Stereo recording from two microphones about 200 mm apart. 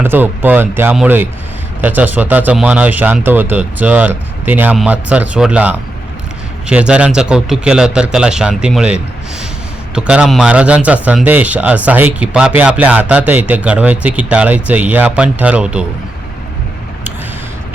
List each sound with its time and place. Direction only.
0.0 s a man's voice: 10° right (ahead or behind)